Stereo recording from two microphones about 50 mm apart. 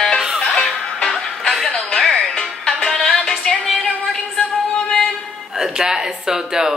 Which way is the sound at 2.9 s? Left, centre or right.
Left.